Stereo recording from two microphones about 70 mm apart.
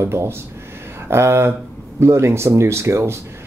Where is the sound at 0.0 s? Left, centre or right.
Right.